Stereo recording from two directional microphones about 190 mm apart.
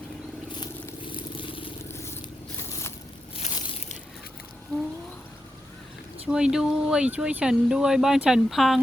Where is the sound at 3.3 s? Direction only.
35° left (ahead or behind).